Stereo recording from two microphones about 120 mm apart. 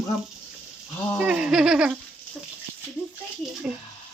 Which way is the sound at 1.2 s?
10° right (ahead or behind).